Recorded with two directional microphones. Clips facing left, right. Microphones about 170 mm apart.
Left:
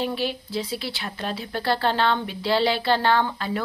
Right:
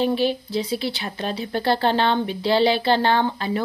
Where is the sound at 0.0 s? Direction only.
20° right (ahead or behind).